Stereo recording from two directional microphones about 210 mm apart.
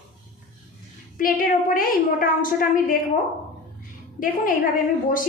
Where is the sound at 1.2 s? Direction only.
40° left (ahead or behind).